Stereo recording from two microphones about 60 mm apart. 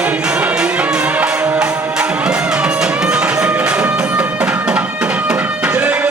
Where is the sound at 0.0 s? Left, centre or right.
Centre.